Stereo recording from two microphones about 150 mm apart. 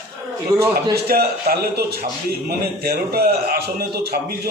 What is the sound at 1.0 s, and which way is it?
A man's voice, 90° right.